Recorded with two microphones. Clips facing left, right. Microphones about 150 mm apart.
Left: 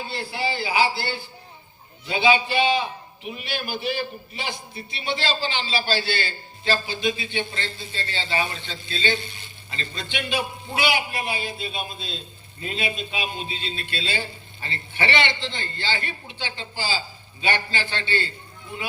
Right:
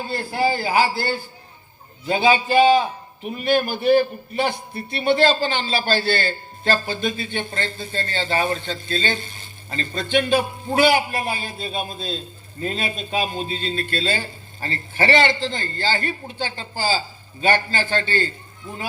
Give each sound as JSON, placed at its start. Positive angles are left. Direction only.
{"t": 0.0, "sound": "a man's voice", "side_deg": -45}